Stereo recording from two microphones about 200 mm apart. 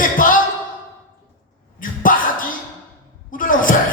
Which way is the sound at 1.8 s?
40° left (ahead or behind).